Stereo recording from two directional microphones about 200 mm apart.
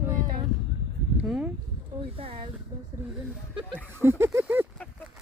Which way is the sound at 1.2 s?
Centre (ahead or behind).